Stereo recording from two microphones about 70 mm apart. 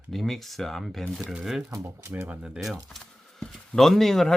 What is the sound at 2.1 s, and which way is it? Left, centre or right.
Speech, right.